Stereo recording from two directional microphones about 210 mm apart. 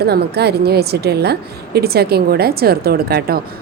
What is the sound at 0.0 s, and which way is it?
A woman's voice, 50° right (ahead or behind).